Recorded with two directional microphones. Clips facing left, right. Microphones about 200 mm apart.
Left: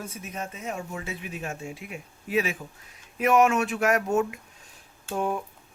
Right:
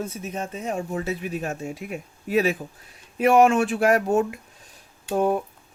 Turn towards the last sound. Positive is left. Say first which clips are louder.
# right 6 dB
turn(degrees=-40)  # may be behind; listen again after turning